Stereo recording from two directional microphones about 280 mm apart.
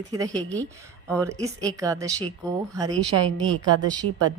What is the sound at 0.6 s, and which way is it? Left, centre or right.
Speech, centre.